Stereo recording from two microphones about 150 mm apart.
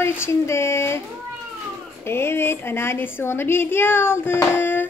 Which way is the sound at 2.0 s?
15° left (ahead or behind).